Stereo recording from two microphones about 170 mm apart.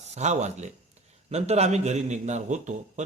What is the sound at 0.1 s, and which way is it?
A man's voice, 40° right (ahead or behind).